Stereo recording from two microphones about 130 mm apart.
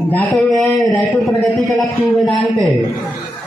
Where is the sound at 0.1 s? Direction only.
5° left (ahead or behind).